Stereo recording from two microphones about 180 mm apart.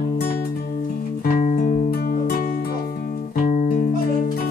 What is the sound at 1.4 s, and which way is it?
Music, 45° left (ahead or behind).